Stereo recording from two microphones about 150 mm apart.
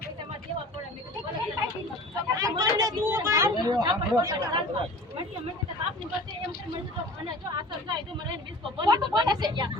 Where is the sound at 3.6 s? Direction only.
30° right (ahead or behind).